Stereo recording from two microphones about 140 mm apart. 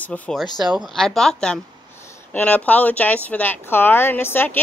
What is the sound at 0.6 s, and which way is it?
A woman's voice, centre (ahead or behind).